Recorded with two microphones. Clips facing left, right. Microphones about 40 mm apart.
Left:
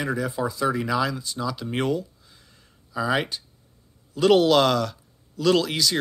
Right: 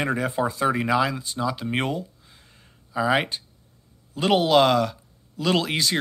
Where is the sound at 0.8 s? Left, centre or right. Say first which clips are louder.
Right 2 dB; right.